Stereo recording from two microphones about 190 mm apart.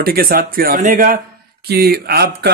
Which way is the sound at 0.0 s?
50° right (ahead or behind).